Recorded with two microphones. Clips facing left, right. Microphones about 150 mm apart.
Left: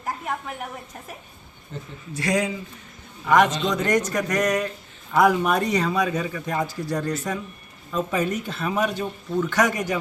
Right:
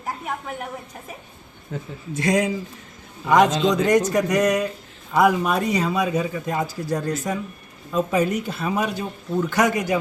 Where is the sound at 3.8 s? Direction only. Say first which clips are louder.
Right 4 dB; 10° right (ahead or behind).